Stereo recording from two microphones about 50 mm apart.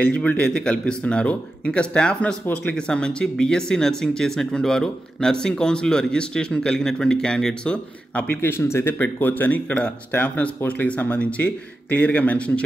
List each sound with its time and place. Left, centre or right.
0.0 s speech: left
2.4 s speech: left
2.7 s speech: centre
7.6 s speech: left
8.3 s speech: left
8.9 s speech: left